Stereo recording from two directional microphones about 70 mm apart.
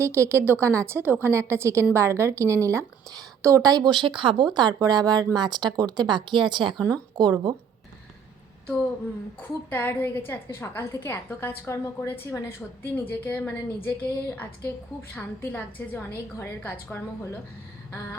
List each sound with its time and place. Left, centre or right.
0.0 s a woman's voice: right
1.3 s a woman's voice: right
6.8 s a woman's voice: right
9.4 s a woman's voice: left